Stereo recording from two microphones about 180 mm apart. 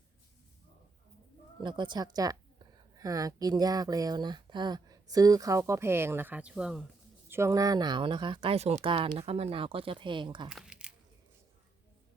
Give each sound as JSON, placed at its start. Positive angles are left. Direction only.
{"t": 1.6, "sound": "a woman's voice", "side_deg": -25}
{"t": 7.3, "sound": "speech", "side_deg": -15}
{"t": 10.5, "sound": "squish", "side_deg": -5}